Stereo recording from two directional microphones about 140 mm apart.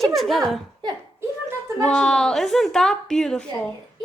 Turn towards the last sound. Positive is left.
turn(degrees=5)  # may be behind; listen again after turning